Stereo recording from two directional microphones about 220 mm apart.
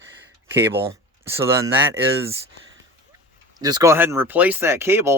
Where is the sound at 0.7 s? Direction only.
10° right (ahead or behind).